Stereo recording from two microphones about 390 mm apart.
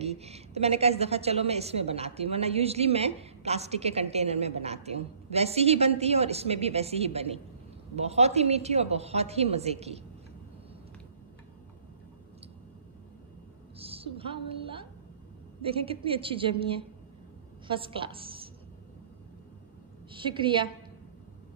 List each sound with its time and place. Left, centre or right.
0.0 s a woman's voice: centre
13.7 s a woman's voice: centre
20.1 s a woman's voice: centre